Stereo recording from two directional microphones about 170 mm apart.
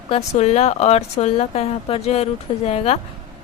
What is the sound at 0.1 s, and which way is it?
A woman's voice, 40° left (ahead or behind).